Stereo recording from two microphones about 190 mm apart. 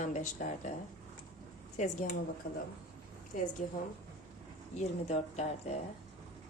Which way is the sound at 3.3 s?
45° left (ahead or behind).